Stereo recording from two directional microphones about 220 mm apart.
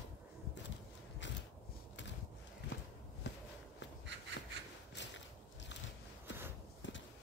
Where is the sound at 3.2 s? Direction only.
50° left (ahead or behind).